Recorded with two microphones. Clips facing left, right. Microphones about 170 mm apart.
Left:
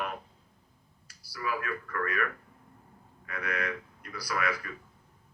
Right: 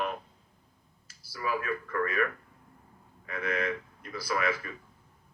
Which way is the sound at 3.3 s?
25° right (ahead or behind).